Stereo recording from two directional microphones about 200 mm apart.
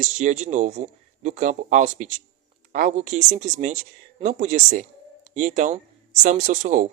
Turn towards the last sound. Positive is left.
turn(degrees=-40)  # may be behind; listen again after turning